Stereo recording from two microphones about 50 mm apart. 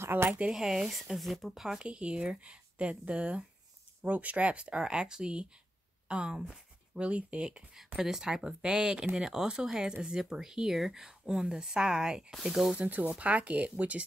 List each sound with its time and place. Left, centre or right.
0.1 s speech: right
0.5 s speech: centre
1.8 s speech: right
12.7 s speech: right